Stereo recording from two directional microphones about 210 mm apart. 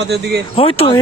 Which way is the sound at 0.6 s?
25° left (ahead or behind).